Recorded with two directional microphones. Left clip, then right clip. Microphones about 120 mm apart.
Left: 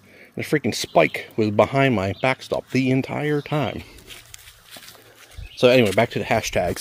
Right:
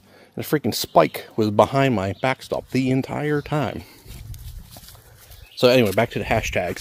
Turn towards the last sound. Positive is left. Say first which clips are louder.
# left 1 dB
turn(degrees=20)  # may be behind; listen again after turning